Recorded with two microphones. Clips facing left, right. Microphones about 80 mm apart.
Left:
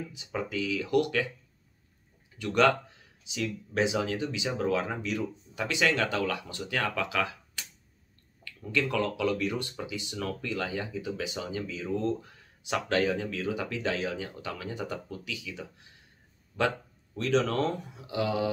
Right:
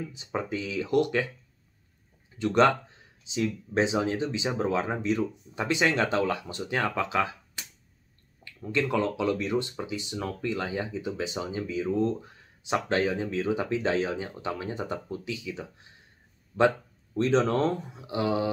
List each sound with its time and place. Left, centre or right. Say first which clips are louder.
0.1 s speech: right 2 dB; right
2.3 s speech: right 2 dB; right